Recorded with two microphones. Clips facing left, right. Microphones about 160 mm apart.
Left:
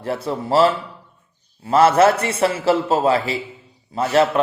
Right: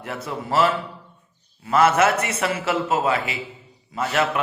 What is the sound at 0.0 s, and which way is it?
Speech, 30° left (ahead or behind).